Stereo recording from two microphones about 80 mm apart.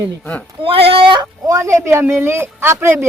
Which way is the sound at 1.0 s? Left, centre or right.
Right.